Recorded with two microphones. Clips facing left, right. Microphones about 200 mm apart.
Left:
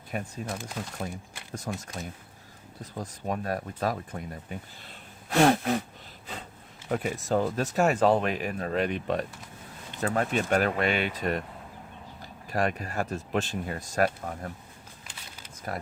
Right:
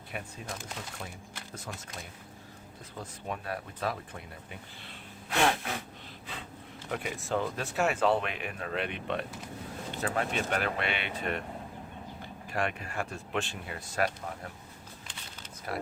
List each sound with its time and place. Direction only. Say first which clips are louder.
0.1 s speech: left 6 dB; 40° left (ahead or behind)
1.5 s speech: left 8 dB; 45° left (ahead or behind)
6.9 s speech: left 6 dB; 40° left (ahead or behind)
15.7 s speech: even; 45° left (ahead or behind)